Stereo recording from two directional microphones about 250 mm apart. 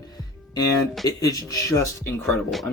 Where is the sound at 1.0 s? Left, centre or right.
Centre.